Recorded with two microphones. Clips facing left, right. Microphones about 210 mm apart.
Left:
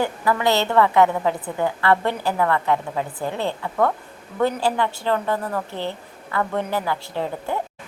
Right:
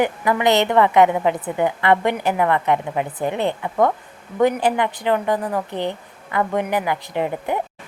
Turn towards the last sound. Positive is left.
turn(degrees=-15)  # may be behind; listen again after turning